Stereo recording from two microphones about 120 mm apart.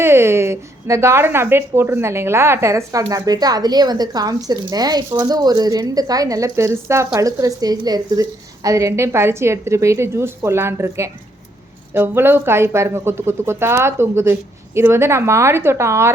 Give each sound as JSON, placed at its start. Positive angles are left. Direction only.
{"t": 0.0, "sound": "a woman's voice", "side_deg": -20}